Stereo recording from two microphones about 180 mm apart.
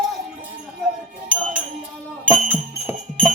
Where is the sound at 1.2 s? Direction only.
5° right (ahead or behind).